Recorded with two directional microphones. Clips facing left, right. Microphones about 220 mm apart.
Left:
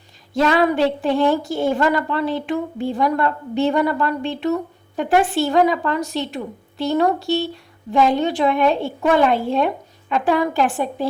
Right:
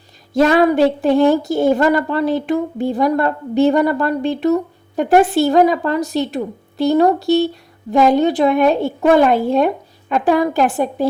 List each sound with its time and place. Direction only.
0.3 s a woman's voice: 40° right (ahead or behind)